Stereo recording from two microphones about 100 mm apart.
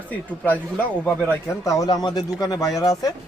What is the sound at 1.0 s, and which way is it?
Speech, 15° left (ahead or behind).